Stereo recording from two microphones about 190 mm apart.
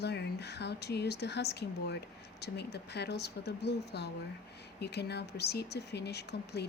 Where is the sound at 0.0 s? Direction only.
60° left (ahead or behind).